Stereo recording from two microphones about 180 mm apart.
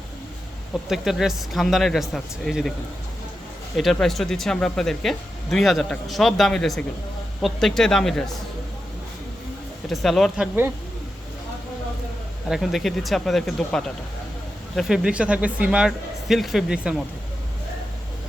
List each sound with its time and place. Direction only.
0.7 s speech: centre (ahead or behind)
3.8 s speech: centre (ahead or behind)
9.9 s speech: centre (ahead or behind)
12.5 s speech: centre (ahead or behind)